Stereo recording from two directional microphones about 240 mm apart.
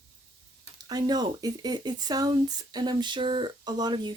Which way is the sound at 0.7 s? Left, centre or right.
Centre.